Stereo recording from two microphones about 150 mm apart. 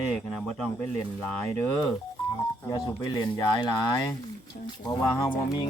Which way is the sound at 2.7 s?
25° left (ahead or behind).